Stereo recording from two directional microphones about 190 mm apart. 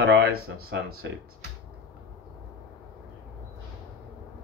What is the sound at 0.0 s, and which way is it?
Speech, 55° right (ahead or behind).